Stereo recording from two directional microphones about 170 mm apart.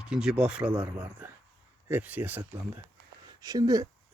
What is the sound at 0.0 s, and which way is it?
Speech, 5° right (ahead or behind).